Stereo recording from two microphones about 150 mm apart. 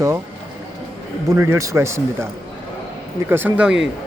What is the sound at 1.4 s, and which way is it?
Speech, 20° right (ahead or behind).